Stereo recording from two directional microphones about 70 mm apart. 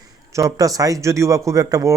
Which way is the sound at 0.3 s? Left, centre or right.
Right.